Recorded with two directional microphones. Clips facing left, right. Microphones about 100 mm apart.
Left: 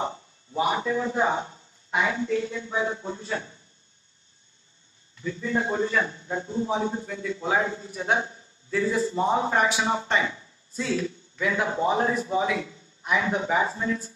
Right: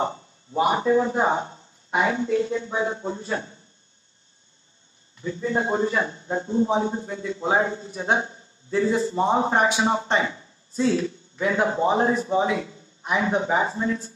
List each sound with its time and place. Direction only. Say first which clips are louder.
0.5 s a man's voice: right 5 dB; 35° right (ahead or behind)
5.2 s a man's voice: right 2 dB; 30° right (ahead or behind)